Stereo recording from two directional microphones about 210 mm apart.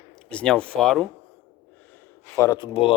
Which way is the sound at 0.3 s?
5° left (ahead or behind).